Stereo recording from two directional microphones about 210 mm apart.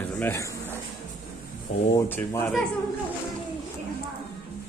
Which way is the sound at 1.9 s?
10° left (ahead or behind).